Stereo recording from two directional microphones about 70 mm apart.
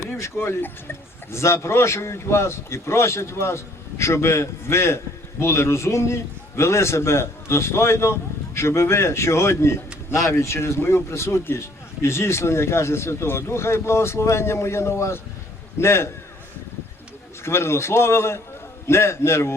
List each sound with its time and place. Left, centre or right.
0.0 s a man's voice: left
17.4 s speech: left